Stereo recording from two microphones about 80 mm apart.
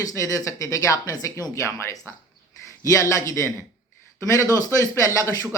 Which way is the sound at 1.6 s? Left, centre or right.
Left.